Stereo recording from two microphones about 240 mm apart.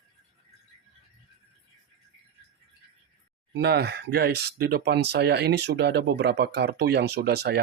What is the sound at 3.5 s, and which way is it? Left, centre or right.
Speech, right.